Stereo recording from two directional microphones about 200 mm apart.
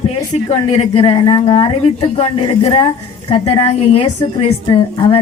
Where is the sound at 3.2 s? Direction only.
30° left (ahead or behind).